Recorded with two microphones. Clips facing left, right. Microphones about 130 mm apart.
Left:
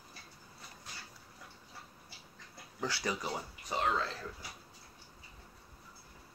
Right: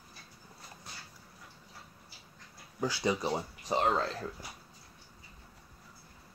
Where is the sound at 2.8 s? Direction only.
20° right (ahead or behind); by 4.0 s 35° right (ahead or behind).